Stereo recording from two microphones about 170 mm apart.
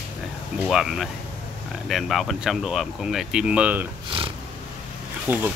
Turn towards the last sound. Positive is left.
turn(degrees=-10)  # may be behind; listen again after turning